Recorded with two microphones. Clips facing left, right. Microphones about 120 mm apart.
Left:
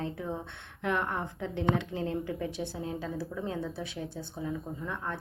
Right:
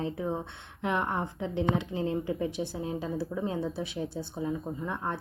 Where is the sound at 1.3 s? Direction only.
15° right (ahead or behind).